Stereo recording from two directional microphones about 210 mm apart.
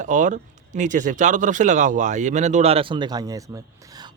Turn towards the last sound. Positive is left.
turn(degrees=-20)  # may be behind; listen again after turning